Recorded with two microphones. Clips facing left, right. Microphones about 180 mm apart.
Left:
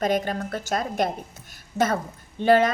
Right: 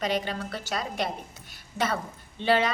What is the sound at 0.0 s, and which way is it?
A woman's voice, 50° left (ahead or behind).